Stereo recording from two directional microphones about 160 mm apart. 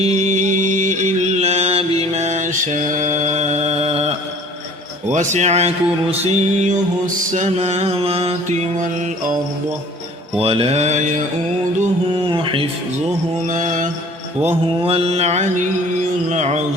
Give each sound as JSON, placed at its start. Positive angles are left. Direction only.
{"t": 0.0, "sound": "music", "side_deg": -45}
{"t": 2.1, "sound": "mantra", "side_deg": -45}
{"t": 5.1, "sound": "mantra", "side_deg": -50}
{"t": 10.4, "sound": "mantra", "side_deg": -35}
{"t": 12.3, "sound": "mantra", "side_deg": -35}
{"t": 13.5, "sound": "mantra", "side_deg": -55}
{"t": 14.4, "sound": "mantra", "side_deg": -35}